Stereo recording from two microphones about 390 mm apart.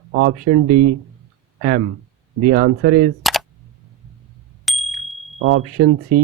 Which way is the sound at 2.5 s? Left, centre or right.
Right.